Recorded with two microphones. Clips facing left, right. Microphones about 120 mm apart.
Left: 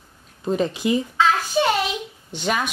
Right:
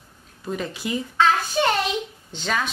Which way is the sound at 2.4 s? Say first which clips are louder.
Left 2 dB; 15° left (ahead or behind).